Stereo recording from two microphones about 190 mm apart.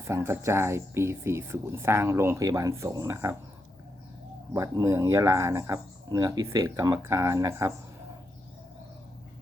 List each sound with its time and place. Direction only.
0.1 s speech: 15° right (ahead or behind)
4.5 s speech: 15° right (ahead or behind)